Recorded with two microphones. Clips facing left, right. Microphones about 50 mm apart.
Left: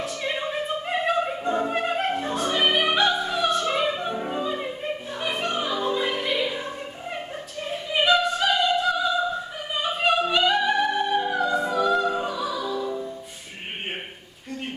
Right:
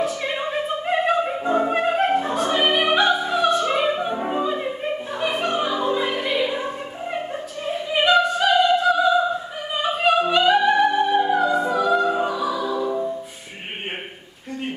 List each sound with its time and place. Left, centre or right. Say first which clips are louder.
0.2 s opera: right 3 dB; centre
2.5 s music: right 3 dB; centre
3.7 s opera: right 4 dB; centre